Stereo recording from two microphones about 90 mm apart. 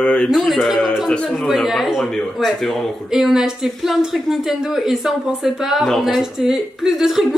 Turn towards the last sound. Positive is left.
turn(degrees=-5)  # may be behind; listen again after turning